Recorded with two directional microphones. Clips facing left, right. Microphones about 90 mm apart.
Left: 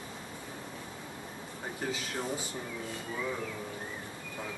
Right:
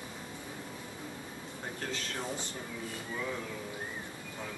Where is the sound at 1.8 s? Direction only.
10° left (ahead or behind).